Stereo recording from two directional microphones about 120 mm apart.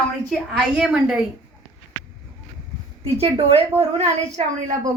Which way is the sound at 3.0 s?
60° right (ahead or behind).